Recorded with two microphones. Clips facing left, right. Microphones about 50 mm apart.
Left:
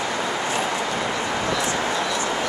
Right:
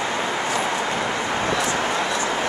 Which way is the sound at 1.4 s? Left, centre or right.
Right.